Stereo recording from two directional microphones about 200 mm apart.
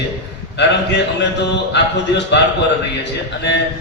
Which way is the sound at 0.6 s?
60° left (ahead or behind).